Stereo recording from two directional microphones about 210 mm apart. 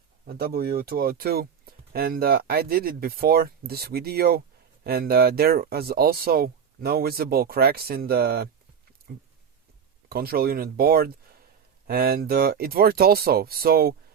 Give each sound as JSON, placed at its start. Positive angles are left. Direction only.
{"t": 0.3, "sound": "speech", "side_deg": -45}
{"t": 10.1, "sound": "speech", "side_deg": -45}